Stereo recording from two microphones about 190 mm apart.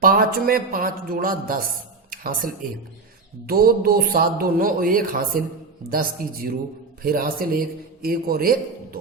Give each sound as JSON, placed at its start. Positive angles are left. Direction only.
{"t": 0.0, "sound": "a man's voice", "side_deg": -50}
{"t": 2.0, "sound": "a sound", "side_deg": -50}
{"t": 3.4, "sound": "a man's voice", "side_deg": -50}